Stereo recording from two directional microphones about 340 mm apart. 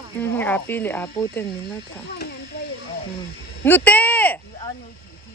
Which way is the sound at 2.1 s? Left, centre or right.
Left.